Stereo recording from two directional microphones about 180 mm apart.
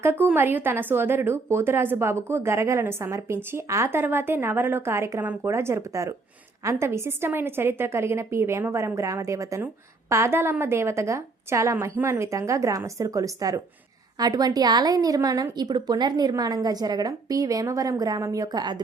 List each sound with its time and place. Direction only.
0.0 s a woman's voice: 10° right (ahead or behind)